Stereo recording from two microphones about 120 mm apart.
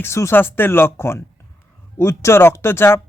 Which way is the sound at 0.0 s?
20° left (ahead or behind).